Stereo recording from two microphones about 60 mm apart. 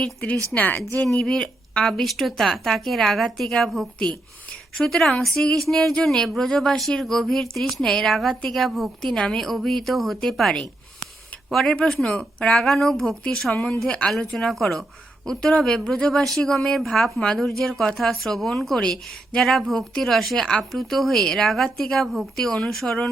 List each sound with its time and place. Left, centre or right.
0.0 s speech: centre
20.4 s speech: centre
20.7 s speech: centre